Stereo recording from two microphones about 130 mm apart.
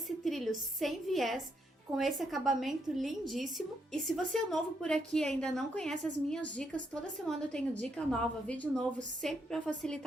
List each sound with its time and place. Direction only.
0.3 s a woman's voice: centre (ahead or behind)